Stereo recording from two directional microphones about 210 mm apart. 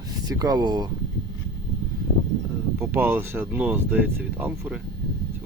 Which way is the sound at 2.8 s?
10° right (ahead or behind).